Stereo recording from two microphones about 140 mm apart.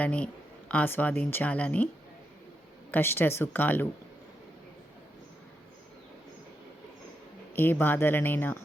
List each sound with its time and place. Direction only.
0.0 s speech: 10° left (ahead or behind)
2.9 s speech: 15° left (ahead or behind)
7.5 s speech: 15° left (ahead or behind)